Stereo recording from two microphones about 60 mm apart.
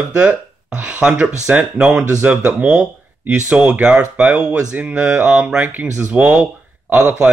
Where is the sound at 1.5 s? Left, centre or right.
Right.